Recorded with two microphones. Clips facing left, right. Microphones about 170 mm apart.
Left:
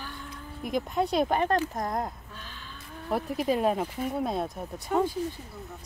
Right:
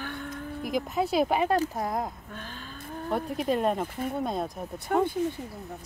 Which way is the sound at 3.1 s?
Centre (ahead or behind).